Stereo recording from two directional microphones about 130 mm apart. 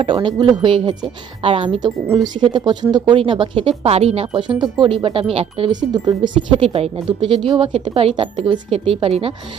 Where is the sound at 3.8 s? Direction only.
55° right (ahead or behind).